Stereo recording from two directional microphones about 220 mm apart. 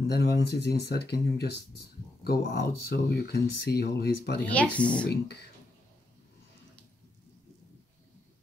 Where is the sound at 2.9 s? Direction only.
45° left (ahead or behind).